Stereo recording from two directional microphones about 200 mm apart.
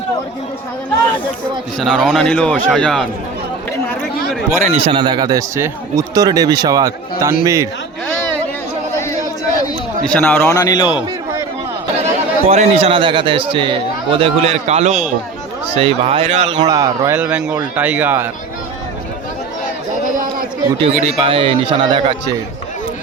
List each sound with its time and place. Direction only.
1.8 s speech: centre (ahead or behind)
4.3 s speech: centre (ahead or behind)
4.6 s speech: 30° right (ahead or behind); by 7.7 s 15° right (ahead or behind)
10.1 s a man's voice: 10° left (ahead or behind)
12.5 s a man's voice: 30° right (ahead or behind)
16.6 s speech: 20° right (ahead or behind)
17.2 s speech: 5° right (ahead or behind)
20.1 s run: 40° right (ahead or behind)
20.8 s speech: 30° right (ahead or behind)